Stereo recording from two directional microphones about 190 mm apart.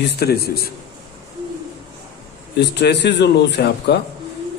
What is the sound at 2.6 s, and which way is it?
A man's voice, 60° left (ahead or behind).